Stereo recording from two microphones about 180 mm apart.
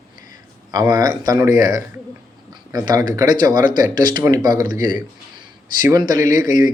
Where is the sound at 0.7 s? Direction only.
20° right (ahead or behind).